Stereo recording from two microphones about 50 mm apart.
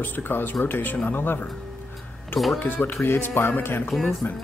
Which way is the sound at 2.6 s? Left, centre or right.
Left.